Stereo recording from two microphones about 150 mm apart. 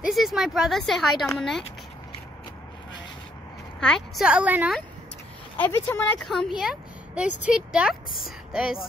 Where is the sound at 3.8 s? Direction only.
Centre (ahead or behind).